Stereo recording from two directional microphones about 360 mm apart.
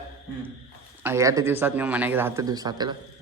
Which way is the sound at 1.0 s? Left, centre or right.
Centre.